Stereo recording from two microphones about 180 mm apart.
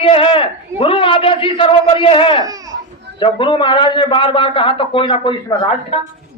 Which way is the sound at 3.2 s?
25° left (ahead or behind).